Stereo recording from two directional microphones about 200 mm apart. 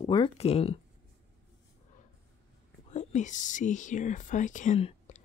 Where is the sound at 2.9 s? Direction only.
35° left (ahead or behind).